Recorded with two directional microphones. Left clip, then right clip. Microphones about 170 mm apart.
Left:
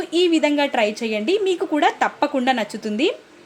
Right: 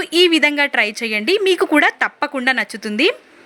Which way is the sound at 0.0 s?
20° right (ahead or behind).